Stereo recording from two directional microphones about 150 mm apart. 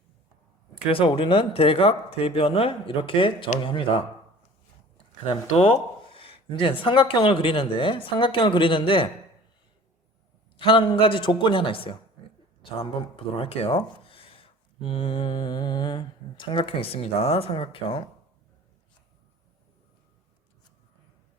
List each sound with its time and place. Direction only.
0.9 s speech: 35° left (ahead or behind)
5.2 s speech: 40° left (ahead or behind)
10.6 s speech: 35° left (ahead or behind)